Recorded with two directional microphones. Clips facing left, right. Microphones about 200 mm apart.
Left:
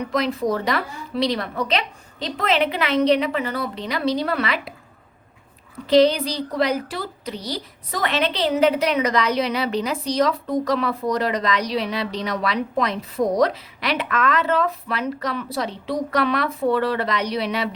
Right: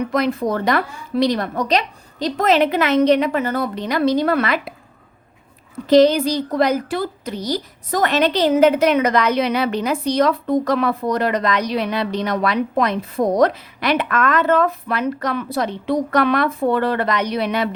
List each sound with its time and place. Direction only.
0.1 s a woman's voice: 55° right (ahead or behind)
5.9 s a woman's voice: 45° right (ahead or behind)